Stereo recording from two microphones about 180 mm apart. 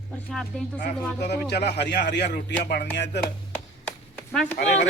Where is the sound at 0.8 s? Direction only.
65° left (ahead or behind).